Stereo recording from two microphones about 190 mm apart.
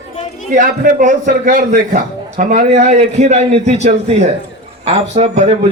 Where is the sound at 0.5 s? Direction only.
40° right (ahead or behind).